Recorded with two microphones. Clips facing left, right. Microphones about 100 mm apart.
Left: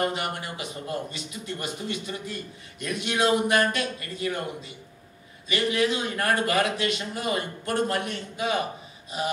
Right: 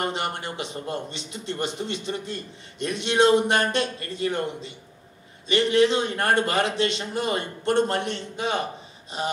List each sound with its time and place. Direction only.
0.0 s a man's voice: 30° right (ahead or behind)